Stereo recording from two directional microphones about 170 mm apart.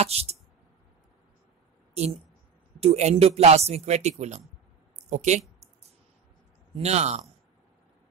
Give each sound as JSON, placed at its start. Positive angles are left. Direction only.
{"t": 0.0, "sound": "a man's voice", "side_deg": -35}
{"t": 2.0, "sound": "a man's voice", "side_deg": -40}
{"t": 6.7, "sound": "a man's voice", "side_deg": -40}